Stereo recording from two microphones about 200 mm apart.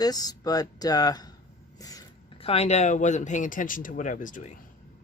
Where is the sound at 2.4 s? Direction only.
30° left (ahead or behind).